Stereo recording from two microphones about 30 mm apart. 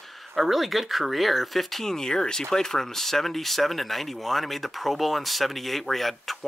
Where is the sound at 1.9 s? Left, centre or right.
Left.